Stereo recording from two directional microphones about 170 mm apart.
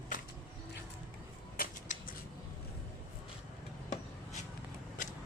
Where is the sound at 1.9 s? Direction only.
45° left (ahead or behind).